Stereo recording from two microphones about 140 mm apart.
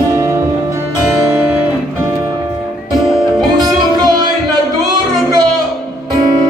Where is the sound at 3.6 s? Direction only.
30° right (ahead or behind).